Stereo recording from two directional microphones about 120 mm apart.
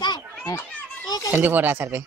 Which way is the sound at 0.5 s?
30° left (ahead or behind).